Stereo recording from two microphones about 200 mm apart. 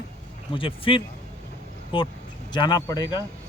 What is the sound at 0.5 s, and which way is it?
Speech, 25° left (ahead or behind).